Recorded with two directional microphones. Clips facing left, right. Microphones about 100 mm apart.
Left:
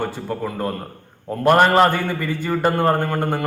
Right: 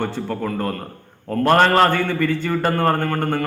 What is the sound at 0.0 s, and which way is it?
A man's voice, 10° left (ahead or behind).